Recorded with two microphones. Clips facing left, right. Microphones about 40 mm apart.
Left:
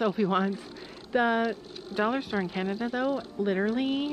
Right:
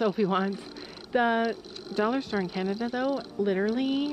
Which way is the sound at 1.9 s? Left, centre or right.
Centre.